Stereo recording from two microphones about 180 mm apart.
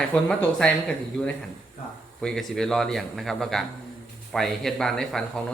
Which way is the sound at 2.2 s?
5° left (ahead or behind).